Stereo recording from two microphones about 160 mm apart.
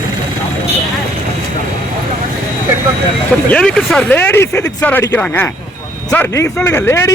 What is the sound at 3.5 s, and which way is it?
Speech, 5° left (ahead or behind).